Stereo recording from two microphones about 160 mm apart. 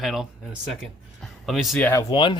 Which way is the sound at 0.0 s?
Centre (ahead or behind).